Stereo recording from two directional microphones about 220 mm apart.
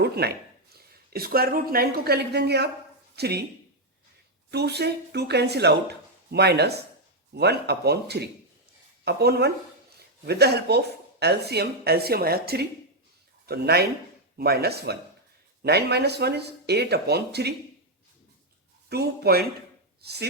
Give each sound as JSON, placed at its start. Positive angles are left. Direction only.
{"t": 0.0, "sound": "speech", "side_deg": -45}
{"t": 4.5, "sound": "speech", "side_deg": -50}
{"t": 18.9, "sound": "speech", "side_deg": -45}